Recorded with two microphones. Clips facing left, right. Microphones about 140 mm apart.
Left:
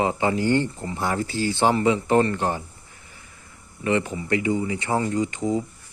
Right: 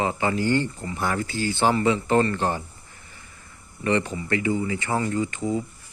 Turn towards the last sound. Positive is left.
turn(degrees=20)  # may be behind; listen again after turning